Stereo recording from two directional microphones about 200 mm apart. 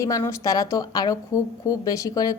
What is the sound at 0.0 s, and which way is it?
A woman's voice, 15° left (ahead or behind).